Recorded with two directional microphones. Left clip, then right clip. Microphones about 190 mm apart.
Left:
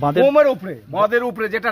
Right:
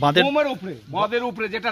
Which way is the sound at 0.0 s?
10° right (ahead or behind).